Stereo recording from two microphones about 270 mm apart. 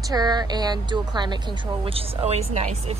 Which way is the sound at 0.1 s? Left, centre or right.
Centre.